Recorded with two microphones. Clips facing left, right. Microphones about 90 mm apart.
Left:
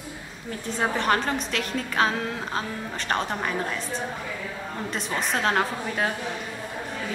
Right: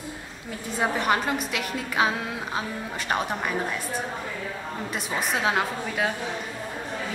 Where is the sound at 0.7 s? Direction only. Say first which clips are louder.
Even; 10° right (ahead or behind).